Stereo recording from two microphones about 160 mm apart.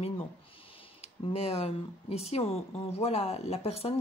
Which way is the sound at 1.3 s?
40° left (ahead or behind).